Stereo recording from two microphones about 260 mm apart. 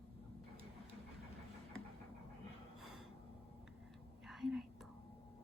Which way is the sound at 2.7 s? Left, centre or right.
Centre.